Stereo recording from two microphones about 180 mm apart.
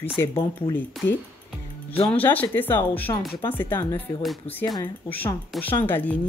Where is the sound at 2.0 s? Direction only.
10° left (ahead or behind).